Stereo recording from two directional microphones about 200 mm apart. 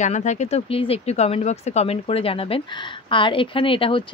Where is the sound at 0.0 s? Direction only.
35° left (ahead or behind).